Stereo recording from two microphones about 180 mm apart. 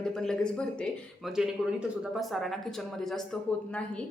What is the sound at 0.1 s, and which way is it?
A woman's voice, 5° left (ahead or behind).